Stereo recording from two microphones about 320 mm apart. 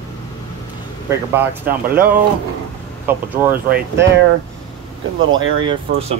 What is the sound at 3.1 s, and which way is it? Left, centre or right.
Speech, centre.